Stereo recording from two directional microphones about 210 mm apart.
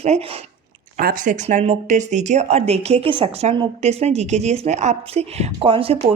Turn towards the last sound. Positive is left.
turn(degrees=-30)  # may be behind; listen again after turning